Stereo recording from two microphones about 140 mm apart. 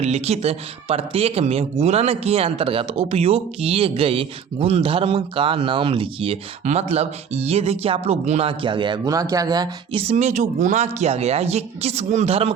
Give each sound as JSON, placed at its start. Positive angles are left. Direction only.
{"t": 0.0, "sound": "speech", "side_deg": -50}
{"t": 9.9, "sound": "speech", "side_deg": -50}